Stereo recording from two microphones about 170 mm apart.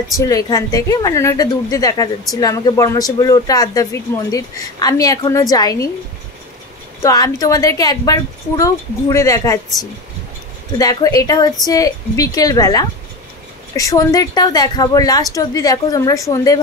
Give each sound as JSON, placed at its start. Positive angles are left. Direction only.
{"t": 0.2, "sound": "speech", "side_deg": 20}
{"t": 7.0, "sound": "speech", "side_deg": 20}
{"t": 10.8, "sound": "speech", "side_deg": 20}